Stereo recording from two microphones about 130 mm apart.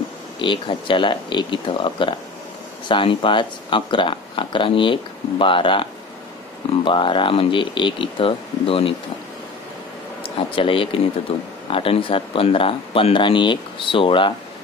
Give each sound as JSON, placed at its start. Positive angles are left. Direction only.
{"t": 0.4, "sound": "speech", "side_deg": 40}
{"t": 10.2, "sound": "speech", "side_deg": 40}